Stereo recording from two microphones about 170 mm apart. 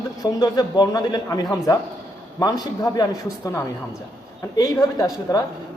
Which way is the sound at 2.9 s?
20° left (ahead or behind).